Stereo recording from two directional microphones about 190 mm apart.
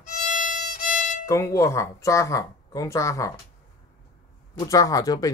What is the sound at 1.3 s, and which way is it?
Speech, 15° left (ahead or behind).